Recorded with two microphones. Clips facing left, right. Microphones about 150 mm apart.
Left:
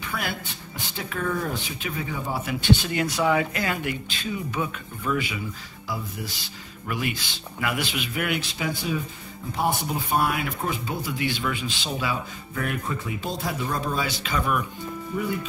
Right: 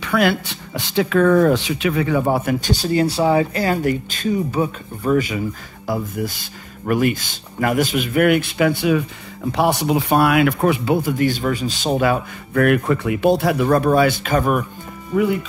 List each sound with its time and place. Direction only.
0.0 s speech: 80° right; by 2.7 s 55° right (ahead or behind)
2.7 s speech: 35° right (ahead or behind); by 9.0 s 65° right (ahead or behind)
9.5 s speech: 80° right; by 14.7 s 50° right (ahead or behind)
15.1 s speech: 90° right